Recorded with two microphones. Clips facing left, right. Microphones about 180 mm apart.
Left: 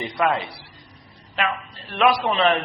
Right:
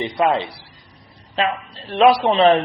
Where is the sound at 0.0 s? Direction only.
20° right (ahead or behind).